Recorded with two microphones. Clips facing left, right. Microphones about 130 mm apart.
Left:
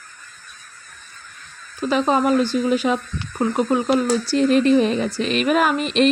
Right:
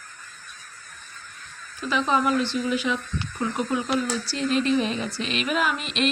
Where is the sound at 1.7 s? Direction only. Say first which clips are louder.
Left 5 dB; 40° left (ahead or behind).